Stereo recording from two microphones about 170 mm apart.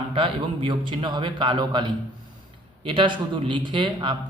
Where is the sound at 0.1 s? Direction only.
30° right (ahead or behind).